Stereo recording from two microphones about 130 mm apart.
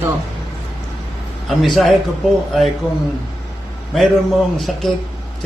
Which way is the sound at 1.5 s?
Centre (ahead or behind).